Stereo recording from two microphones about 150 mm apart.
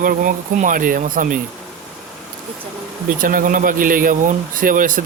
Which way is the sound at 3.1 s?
65° right (ahead or behind).